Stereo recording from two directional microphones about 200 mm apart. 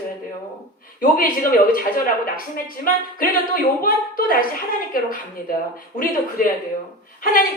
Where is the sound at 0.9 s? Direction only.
45° left (ahead or behind).